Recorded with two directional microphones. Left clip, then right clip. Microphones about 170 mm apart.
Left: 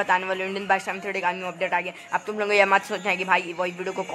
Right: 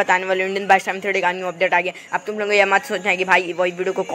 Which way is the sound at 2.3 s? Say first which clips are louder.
Right 3 dB; 5° right (ahead or behind).